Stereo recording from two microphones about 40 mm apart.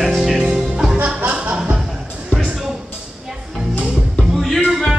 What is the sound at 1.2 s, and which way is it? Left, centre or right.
Music, right.